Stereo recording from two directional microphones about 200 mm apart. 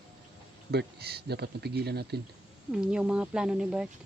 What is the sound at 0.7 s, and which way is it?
Speech, 55° right (ahead or behind).